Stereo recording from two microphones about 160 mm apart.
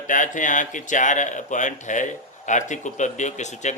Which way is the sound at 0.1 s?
55° left (ahead or behind).